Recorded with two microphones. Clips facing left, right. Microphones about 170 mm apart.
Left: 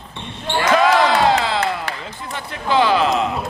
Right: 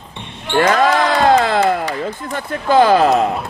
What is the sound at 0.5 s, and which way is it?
Basketball bounce, 55° right (ahead or behind).